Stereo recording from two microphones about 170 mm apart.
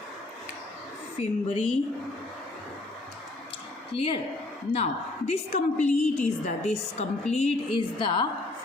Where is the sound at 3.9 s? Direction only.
35° left (ahead or behind).